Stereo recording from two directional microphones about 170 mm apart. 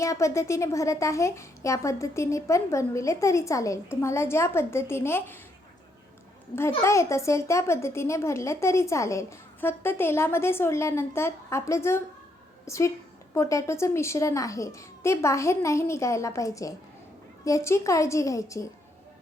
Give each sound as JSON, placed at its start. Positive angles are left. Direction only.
{"t": 0.0, "sound": "a child's voice", "side_deg": 20}
{"t": 6.6, "sound": "a child's voice", "side_deg": 15}